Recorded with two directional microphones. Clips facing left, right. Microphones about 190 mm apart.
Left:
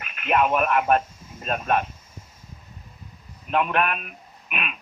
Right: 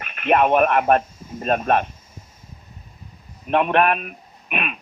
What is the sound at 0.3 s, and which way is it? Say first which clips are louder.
Speech: right 4 dB; 50° right (ahead or behind).